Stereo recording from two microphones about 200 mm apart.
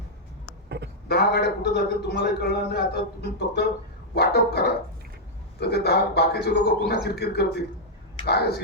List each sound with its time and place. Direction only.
1.0 s a man's voice: 50° left (ahead or behind)
4.1 s dog: 50° left (ahead or behind)
5.5 s a man's voice: 55° left (ahead or behind)